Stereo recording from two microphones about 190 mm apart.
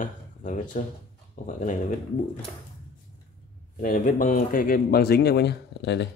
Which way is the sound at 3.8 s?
45° left (ahead or behind).